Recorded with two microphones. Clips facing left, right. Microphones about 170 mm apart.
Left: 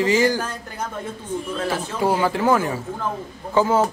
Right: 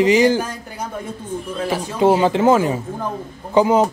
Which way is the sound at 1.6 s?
15° right (ahead or behind).